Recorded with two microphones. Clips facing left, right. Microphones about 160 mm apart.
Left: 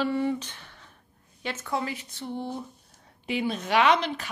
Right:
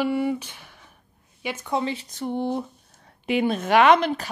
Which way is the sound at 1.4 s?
15° right (ahead or behind).